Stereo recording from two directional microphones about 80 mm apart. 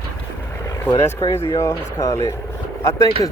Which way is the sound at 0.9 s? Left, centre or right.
Left.